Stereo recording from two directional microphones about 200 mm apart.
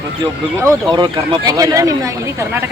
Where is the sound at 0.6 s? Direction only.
20° right (ahead or behind).